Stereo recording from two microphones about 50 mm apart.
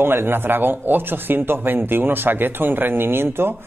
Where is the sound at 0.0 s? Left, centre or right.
Right.